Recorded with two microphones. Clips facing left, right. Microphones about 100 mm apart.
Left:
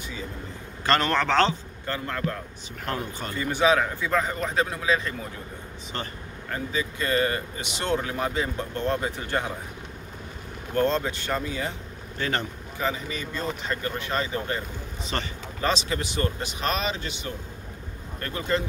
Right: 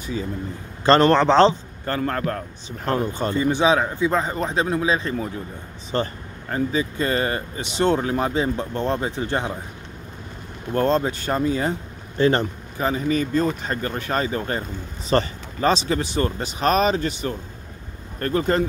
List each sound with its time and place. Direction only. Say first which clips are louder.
0.8 s a man's voice: right 8 dB; 30° right (ahead or behind)
1.9 s speech: right 6 dB; 50° right (ahead or behind)
2.8 s a man's voice: right 8 dB; 35° right (ahead or behind)
10.7 s speech: right 4 dB; 40° right (ahead or behind)